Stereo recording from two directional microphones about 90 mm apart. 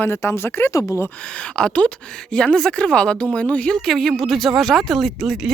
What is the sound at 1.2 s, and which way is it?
Speech, 15° left (ahead or behind).